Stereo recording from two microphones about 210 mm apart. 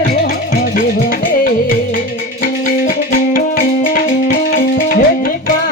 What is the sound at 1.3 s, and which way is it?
Music, 45° left (ahead or behind).